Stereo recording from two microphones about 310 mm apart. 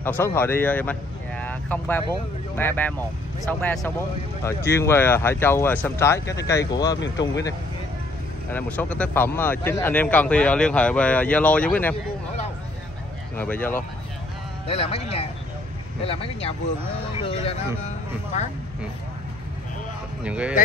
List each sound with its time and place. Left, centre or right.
0.0 s a man's voice: centre
7.0 s speech: left
8.5 s a man's voice: centre
13.4 s a man's voice: centre
14.7 s speech: centre
20.2 s a man's voice: centre